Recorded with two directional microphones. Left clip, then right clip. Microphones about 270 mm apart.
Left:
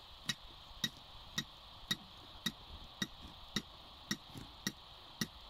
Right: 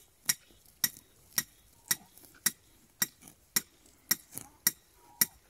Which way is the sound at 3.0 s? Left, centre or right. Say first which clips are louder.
Right 7 dB; left.